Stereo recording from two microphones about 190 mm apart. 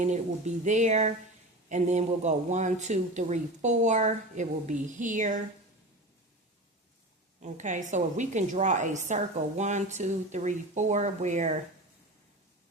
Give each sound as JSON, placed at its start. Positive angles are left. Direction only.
{"t": 0.0, "sound": "a woman's voice", "side_deg": -40}
{"t": 7.4, "sound": "a woman's voice", "side_deg": -40}